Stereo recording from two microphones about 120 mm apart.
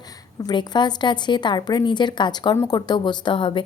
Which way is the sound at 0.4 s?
35° left (ahead or behind).